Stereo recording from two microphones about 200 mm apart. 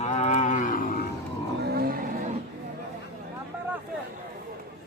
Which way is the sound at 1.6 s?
50° right (ahead or behind).